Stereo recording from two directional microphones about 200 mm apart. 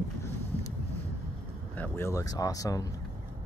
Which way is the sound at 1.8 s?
10° left (ahead or behind).